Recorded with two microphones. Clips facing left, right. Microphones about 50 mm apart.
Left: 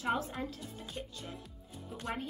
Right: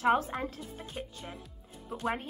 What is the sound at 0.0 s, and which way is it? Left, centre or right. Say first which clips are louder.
Speech: right 7 dB; right.